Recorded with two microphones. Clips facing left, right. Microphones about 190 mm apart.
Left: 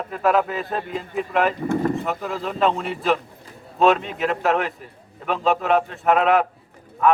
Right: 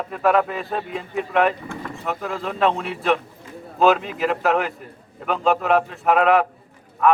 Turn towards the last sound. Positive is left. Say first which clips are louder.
# right 1 dB
turn(degrees=0)  # may be behind; listen again after turning